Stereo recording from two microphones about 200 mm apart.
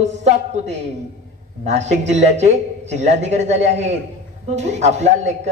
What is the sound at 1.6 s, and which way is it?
A man's voice, 35° right (ahead or behind).